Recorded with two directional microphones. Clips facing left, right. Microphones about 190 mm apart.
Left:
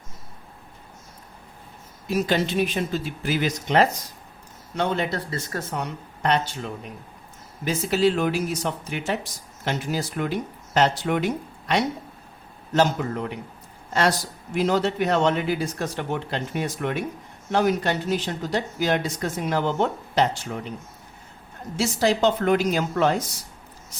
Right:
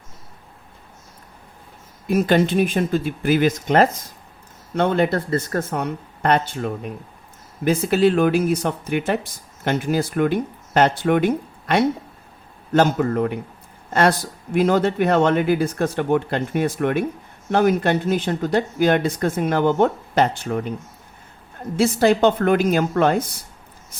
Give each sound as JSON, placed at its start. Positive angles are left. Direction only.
{"t": 2.0, "sound": "speech", "side_deg": -55}
{"t": 21.8, "sound": "speech", "side_deg": -55}